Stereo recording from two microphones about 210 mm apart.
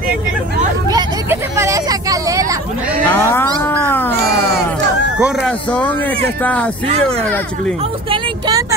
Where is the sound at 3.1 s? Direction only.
10° left (ahead or behind).